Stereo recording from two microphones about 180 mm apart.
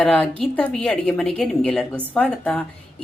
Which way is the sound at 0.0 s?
5° left (ahead or behind).